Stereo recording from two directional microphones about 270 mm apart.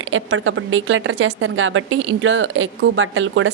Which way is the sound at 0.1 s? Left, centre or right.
Right.